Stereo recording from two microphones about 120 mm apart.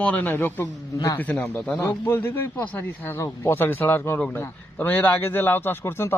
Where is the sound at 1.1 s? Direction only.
15° left (ahead or behind).